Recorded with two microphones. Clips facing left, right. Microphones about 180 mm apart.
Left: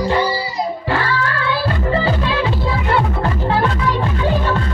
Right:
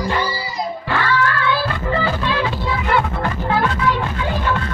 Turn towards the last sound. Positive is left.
turn(degrees=30)  # may be behind; listen again after turning